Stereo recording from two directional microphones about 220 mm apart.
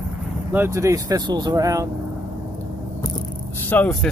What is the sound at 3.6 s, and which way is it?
Speech, 5° left (ahead or behind).